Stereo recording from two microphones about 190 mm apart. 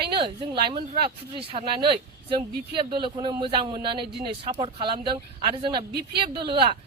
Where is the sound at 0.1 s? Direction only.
25° right (ahead or behind).